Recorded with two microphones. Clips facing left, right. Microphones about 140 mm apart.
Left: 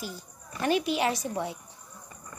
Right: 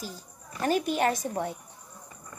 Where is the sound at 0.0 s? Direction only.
40° right (ahead or behind).